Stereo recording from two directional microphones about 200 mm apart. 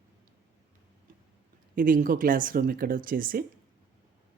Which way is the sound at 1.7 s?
45° right (ahead or behind).